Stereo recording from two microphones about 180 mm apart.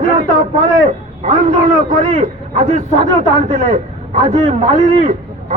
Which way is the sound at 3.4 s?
45° right (ahead or behind).